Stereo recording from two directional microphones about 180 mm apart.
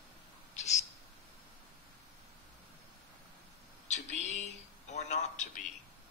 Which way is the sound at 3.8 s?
40° left (ahead or behind).